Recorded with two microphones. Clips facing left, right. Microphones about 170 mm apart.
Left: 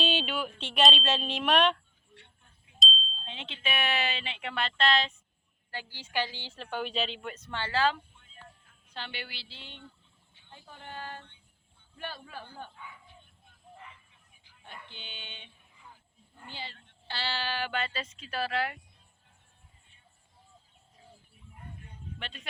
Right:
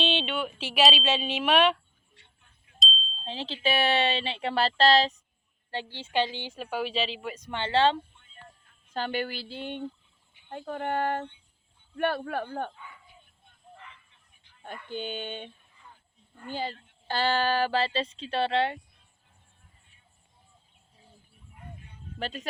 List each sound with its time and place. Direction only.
0.0 s a sound: 5° left (ahead or behind)
0.6 s speech: 5° right (ahead or behind)
2.1 s a sound: 65° left (ahead or behind)
2.7 s a sound: centre (ahead or behind)
3.2 s speech: 35° right (ahead or behind)
5.7 s a woman's voice: 25° right (ahead or behind); by 7.4 s 5° right (ahead or behind)
7.4 s speech: 20° right (ahead or behind)
7.7 s speech: 30° right (ahead or behind)
8.2 s music: centre (ahead or behind)
8.9 s speech: 45° right (ahead or behind)
14.8 s speech: 45° right (ahead or behind)
15.7 s a sound: 10° left (ahead or behind)
16.5 s speech: 45° right (ahead or behind); by 18.8 s 25° right (ahead or behind)
22.2 s speech: 40° right (ahead or behind)